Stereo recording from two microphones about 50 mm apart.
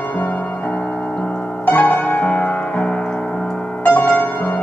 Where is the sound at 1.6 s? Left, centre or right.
Left.